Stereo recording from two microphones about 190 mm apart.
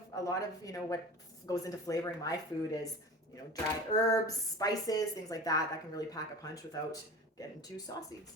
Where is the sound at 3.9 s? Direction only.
20° left (ahead or behind).